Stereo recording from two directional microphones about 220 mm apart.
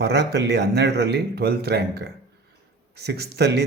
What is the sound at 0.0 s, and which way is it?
Speech, 50° right (ahead or behind).